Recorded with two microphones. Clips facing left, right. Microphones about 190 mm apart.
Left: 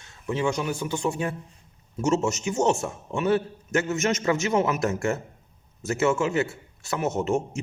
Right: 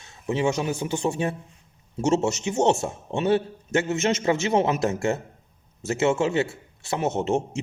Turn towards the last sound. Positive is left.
turn(degrees=-30)  # may be behind; listen again after turning